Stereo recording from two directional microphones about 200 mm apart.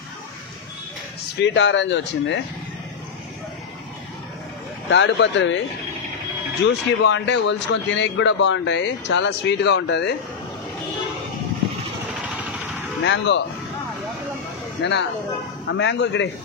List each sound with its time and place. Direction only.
1.4 s a man's voice: 65° left (ahead or behind)
4.8 s a man's voice: 65° left (ahead or behind)
6.6 s a man's voice: 60° left (ahead or behind)
13.0 s a man's voice: 60° left (ahead or behind)
14.8 s a man's voice: 60° left (ahead or behind)